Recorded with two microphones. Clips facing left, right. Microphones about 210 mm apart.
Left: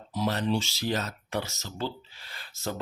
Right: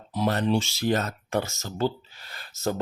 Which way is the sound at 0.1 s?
55° right (ahead or behind).